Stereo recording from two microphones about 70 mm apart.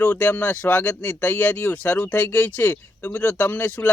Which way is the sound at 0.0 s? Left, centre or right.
Left.